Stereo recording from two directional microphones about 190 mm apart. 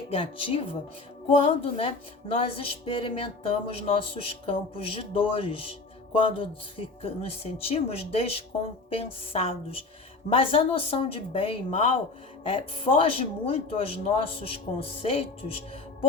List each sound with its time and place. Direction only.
0.1 s music: 30° left (ahead or behind)
6.1 s speech: 30° left (ahead or behind)
10.2 s music: 30° left (ahead or behind)